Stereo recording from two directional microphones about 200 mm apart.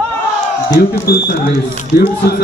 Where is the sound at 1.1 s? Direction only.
50° left (ahead or behind).